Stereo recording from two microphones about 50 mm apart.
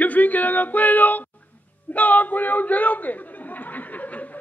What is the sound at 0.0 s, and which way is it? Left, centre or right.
Music, left.